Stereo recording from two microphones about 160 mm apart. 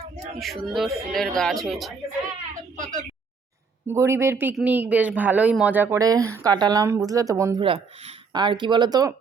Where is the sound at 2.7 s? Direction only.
55° right (ahead or behind).